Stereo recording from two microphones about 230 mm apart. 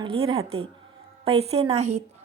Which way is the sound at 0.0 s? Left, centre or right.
Right.